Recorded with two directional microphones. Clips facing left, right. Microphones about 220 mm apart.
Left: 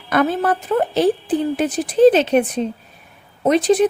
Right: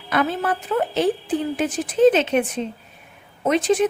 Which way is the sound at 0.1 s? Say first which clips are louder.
Left 4 dB; 45° left (ahead or behind).